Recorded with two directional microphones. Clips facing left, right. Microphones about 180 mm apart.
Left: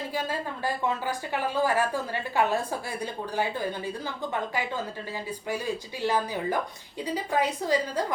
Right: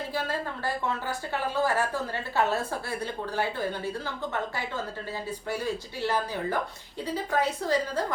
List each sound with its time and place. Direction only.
0.1 s speech: 15° left (ahead or behind)
5.5 s speech: 15° left (ahead or behind)